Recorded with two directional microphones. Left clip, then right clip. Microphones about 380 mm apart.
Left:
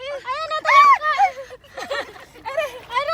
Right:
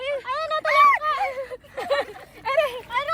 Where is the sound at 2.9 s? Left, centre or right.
Centre.